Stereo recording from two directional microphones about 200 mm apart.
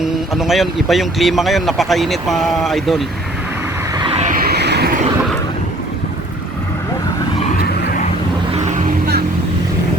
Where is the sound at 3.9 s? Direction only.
25° right (ahead or behind); by 5.0 s 55° right (ahead or behind).